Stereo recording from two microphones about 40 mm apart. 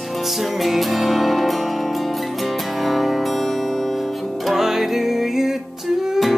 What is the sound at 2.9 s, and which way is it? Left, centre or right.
Music, centre.